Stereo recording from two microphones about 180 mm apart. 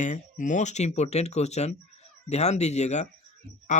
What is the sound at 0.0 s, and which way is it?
Speech, 45° left (ahead or behind).